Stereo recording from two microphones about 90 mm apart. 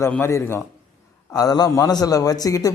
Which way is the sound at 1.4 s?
45° left (ahead or behind).